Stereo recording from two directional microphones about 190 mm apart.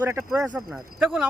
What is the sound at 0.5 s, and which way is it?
Speech, centre (ahead or behind).